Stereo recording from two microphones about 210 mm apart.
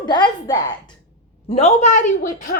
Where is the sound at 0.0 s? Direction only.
20° left (ahead or behind).